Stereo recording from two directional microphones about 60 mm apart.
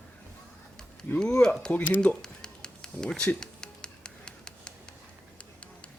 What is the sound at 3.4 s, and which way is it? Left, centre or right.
Music, centre.